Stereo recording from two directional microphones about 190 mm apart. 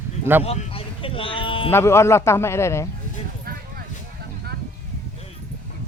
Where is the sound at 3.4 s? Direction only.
50° right (ahead or behind).